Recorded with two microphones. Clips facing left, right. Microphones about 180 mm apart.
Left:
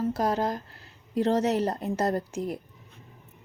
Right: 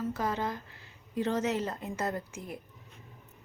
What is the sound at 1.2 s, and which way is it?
Speech, 35° left (ahead or behind).